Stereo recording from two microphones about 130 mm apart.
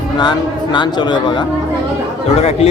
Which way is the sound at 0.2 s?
35° left (ahead or behind).